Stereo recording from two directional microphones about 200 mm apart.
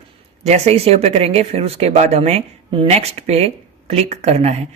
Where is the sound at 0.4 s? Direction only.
30° right (ahead or behind).